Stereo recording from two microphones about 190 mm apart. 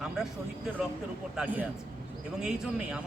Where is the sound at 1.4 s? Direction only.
10° right (ahead or behind).